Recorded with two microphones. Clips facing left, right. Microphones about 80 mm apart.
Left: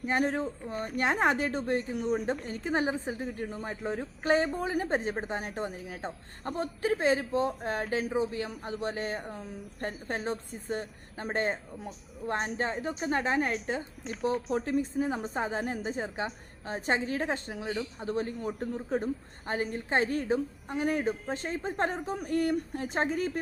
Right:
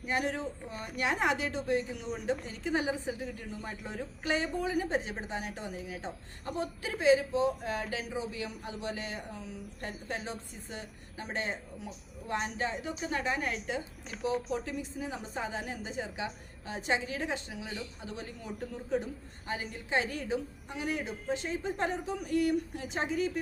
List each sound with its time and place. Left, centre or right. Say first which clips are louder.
0.0 s a woman's voice: left 4 dB; left